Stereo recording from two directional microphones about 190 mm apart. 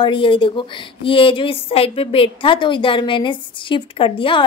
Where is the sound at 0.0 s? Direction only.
25° left (ahead or behind).